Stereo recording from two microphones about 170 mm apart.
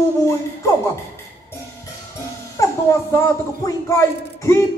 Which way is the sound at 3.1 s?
15° left (ahead or behind).